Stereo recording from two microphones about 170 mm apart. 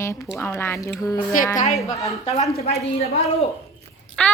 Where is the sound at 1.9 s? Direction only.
20° left (ahead or behind).